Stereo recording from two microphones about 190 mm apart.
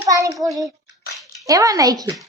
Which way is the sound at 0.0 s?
15° right (ahead or behind).